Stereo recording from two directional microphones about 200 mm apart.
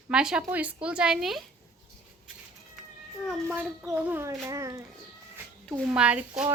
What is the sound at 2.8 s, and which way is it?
Cat, centre (ahead or behind).